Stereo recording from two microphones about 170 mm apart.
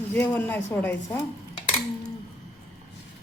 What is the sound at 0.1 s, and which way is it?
A woman's voice, 10° left (ahead or behind).